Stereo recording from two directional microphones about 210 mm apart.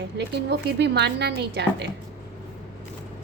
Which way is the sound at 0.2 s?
55° right (ahead or behind).